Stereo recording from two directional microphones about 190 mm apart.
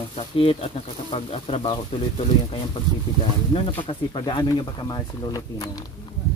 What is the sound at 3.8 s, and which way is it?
Speech, 25° left (ahead or behind).